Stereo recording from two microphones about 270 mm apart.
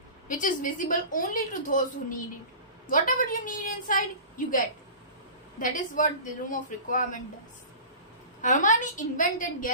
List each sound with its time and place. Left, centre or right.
0.3 s a woman's voice: left
5.6 s a woman's voice: left
8.4 s a woman's voice: left